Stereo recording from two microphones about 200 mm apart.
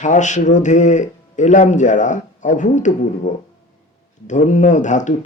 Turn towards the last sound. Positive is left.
turn(degrees=40)  # may be behind; listen again after turning